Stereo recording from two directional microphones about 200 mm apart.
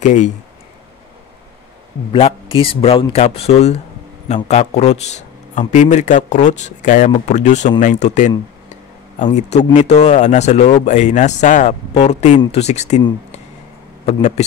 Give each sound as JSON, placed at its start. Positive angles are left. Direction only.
{"t": 0.0, "sound": "a man's voice", "side_deg": 40}
{"t": 2.5, "sound": "a man's voice", "side_deg": 25}
{"t": 14.0, "sound": "a man's voice", "side_deg": 35}